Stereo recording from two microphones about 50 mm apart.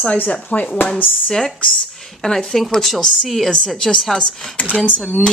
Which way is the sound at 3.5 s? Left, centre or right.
Centre.